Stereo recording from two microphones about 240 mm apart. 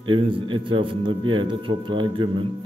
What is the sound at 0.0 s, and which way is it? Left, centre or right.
A man's voice, right.